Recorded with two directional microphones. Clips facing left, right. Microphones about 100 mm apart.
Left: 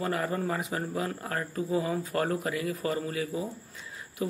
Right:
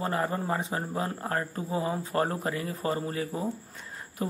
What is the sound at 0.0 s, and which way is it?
Speech, 30° right (ahead or behind).